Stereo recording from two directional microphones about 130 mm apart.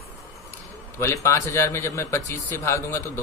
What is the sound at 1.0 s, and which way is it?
Speech, 20° left (ahead or behind).